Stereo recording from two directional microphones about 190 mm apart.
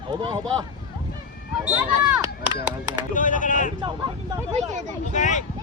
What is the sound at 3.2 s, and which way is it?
Speech, 45° left (ahead or behind).